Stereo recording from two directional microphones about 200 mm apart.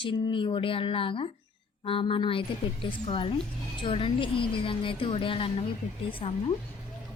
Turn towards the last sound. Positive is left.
turn(degrees=25)  # may be behind; listen again after turning